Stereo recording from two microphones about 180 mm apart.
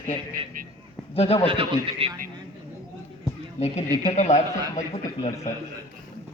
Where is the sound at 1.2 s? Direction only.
35° left (ahead or behind).